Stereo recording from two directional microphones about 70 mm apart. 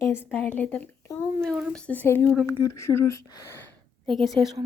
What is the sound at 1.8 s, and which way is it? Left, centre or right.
A woman's voice, left.